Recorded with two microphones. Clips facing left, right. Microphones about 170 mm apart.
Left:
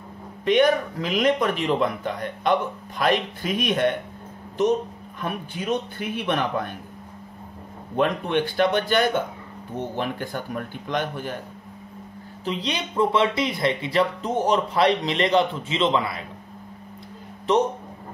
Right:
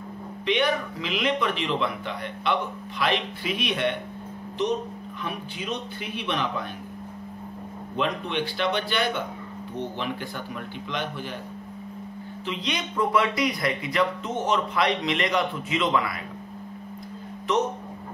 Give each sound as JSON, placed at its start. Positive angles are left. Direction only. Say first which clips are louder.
{"t": 0.5, "sound": "a man's voice", "louder": "left 6 dB", "side_deg": 45}
{"t": 5.2, "sound": "a man's voice", "louder": "left 5 dB", "side_deg": 50}
{"t": 7.9, "sound": "a man's voice", "louder": "left 5 dB", "side_deg": 50}
{"t": 12.4, "sound": "speech", "louder": "left 3 dB", "side_deg": 35}
{"t": 17.5, "sound": "speech", "louder": "left 4 dB", "side_deg": 30}